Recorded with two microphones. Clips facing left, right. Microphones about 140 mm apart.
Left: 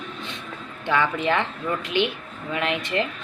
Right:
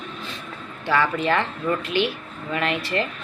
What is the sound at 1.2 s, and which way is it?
Speech, 15° left (ahead or behind).